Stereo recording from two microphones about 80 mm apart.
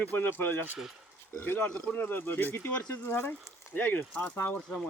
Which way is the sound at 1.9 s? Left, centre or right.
Left.